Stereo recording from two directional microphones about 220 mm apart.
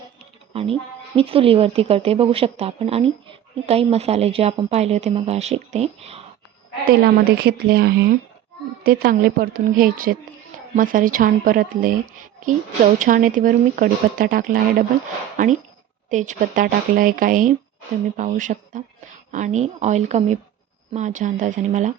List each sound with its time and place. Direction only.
0.5 s speech: 25° right (ahead or behind)
7.0 s a woman's voice: 45° right (ahead or behind)